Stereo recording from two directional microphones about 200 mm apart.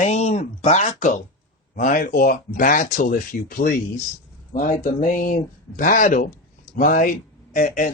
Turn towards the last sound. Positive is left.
turn(degrees=40)  # may be behind; listen again after turning